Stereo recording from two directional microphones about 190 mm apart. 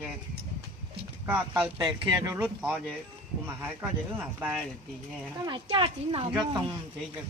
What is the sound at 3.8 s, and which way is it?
Speech, 10° right (ahead or behind).